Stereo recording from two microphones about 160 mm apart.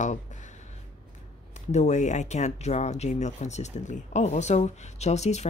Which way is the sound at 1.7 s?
50° left (ahead or behind).